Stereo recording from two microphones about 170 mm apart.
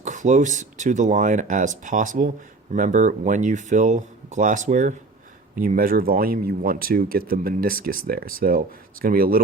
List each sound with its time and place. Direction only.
0.0 s speech: 45° right (ahead or behind)